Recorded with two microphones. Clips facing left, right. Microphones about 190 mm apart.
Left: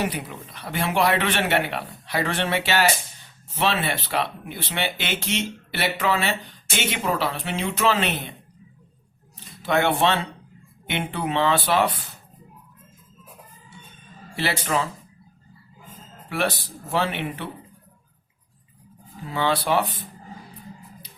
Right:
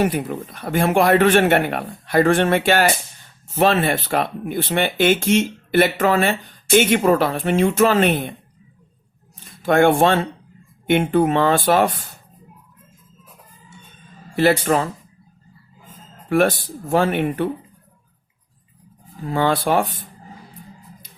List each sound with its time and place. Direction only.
0.0 s speech: 50° right (ahead or behind)
9.4 s speech: 50° right (ahead or behind)
14.3 s speech: 50° right (ahead or behind)
16.3 s speech: 45° right (ahead or behind)
19.2 s speech: 45° right (ahead or behind)